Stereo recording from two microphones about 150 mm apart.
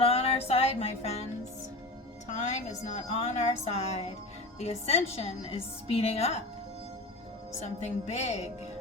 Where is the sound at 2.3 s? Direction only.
50° left (ahead or behind).